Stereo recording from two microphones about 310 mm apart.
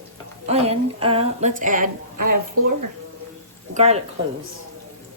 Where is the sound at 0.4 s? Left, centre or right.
Centre.